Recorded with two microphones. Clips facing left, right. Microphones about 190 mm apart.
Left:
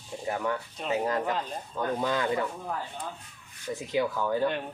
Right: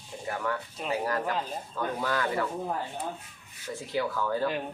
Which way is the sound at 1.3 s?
Centre (ahead or behind).